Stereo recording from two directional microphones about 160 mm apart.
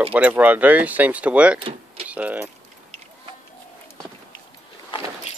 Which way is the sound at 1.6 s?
35° right (ahead or behind).